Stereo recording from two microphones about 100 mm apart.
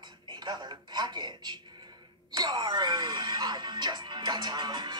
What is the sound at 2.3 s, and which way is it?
Speech, 45° right (ahead or behind).